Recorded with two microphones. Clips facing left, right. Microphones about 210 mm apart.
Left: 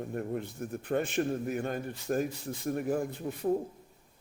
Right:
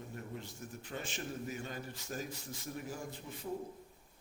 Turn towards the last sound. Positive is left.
turn(degrees=60)  # may be behind; listen again after turning